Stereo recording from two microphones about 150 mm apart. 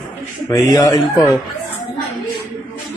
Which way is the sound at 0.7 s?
25° left (ahead or behind).